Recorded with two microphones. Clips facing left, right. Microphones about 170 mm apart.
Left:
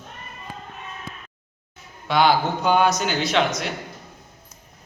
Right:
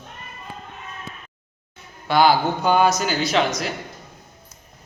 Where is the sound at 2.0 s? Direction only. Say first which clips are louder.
Right 2 dB; centre (ahead or behind).